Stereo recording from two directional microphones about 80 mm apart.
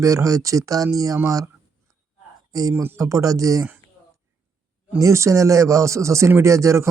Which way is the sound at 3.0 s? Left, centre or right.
Right.